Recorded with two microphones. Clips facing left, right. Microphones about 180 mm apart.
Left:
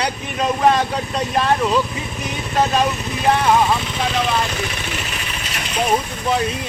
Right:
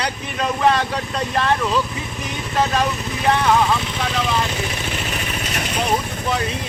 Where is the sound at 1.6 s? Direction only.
10° left (ahead or behind).